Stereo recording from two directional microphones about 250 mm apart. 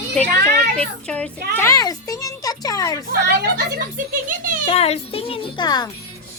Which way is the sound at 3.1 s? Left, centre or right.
Right.